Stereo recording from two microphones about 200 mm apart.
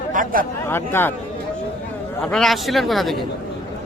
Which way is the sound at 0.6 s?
10° left (ahead or behind).